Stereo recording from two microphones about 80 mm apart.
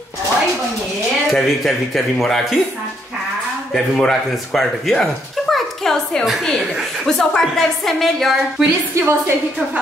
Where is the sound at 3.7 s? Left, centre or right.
Centre.